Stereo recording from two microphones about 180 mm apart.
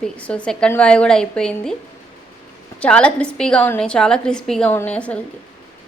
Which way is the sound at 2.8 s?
5° left (ahead or behind).